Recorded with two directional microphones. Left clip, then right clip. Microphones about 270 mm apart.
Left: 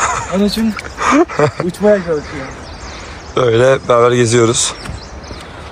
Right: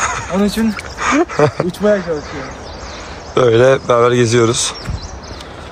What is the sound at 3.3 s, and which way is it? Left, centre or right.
Speech, centre.